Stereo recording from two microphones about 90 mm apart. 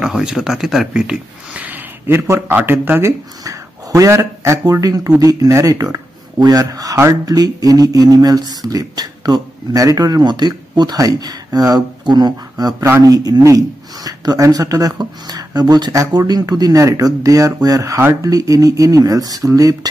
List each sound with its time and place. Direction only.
0.0 s speech: 10° right (ahead or behind)
2.0 s a man's voice: 30° right (ahead or behind)